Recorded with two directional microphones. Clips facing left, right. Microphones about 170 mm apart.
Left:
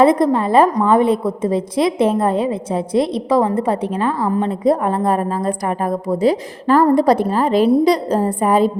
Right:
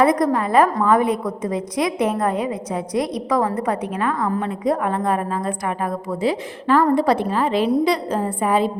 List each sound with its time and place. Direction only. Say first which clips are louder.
0.0 s a woman's voice: left 4 dB; 25° left (ahead or behind)